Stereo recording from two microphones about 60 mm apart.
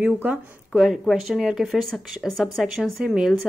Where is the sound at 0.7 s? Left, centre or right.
Centre.